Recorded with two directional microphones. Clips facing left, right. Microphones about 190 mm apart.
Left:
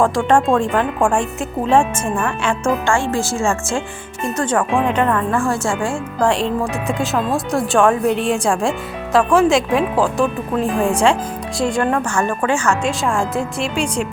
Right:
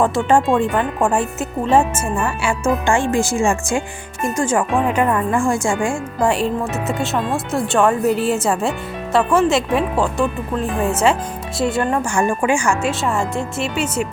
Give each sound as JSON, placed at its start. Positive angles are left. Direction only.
{"t": 0.0, "sound": "speech", "side_deg": -5}
{"t": 12.9, "sound": "speech", "side_deg": 0}